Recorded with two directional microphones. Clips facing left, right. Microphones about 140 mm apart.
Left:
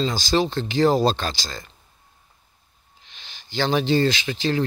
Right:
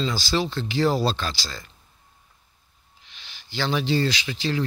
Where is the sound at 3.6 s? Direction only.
45° left (ahead or behind).